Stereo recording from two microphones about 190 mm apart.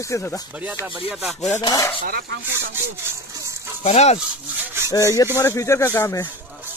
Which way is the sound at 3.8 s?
35° left (ahead or behind).